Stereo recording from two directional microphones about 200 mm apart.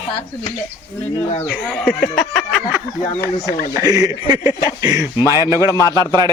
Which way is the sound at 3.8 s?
20° right (ahead or behind).